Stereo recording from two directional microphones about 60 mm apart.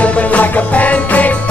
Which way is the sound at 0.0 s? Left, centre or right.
Left.